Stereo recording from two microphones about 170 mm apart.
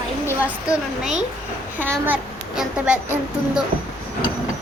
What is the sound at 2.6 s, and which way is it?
Speech, 5° right (ahead or behind).